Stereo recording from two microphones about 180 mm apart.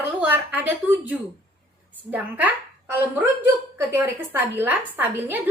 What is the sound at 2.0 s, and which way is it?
A woman's voice, 10° right (ahead or behind).